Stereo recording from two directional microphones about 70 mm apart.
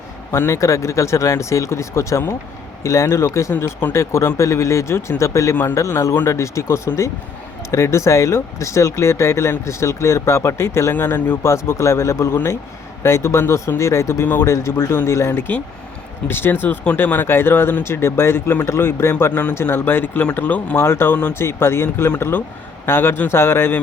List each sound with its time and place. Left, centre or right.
0.3 s speech: left
3.6 s speech: left
10.9 s speech: left
15.3 s speech: left
17.8 s speech: left
19.3 s speech: left